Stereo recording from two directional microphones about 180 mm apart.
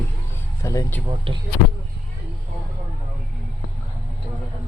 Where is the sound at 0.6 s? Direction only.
15° left (ahead or behind).